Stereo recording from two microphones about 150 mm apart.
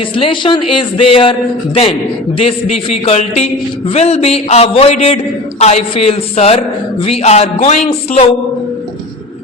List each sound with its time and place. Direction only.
0.2 s a man's voice: 35° left (ahead or behind)
3.1 s speech: 45° left (ahead or behind)